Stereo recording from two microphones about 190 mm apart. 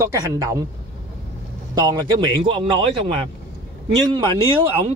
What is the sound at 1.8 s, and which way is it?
A man's voice, 20° right (ahead or behind).